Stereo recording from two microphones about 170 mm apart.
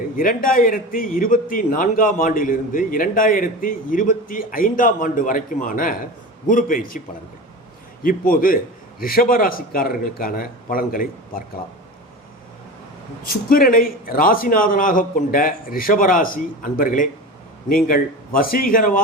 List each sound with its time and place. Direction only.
0.2 s a man's voice: 55° left (ahead or behind)
8.0 s a man's voice: 55° left (ahead or behind)
13.2 s a man's voice: 55° left (ahead or behind)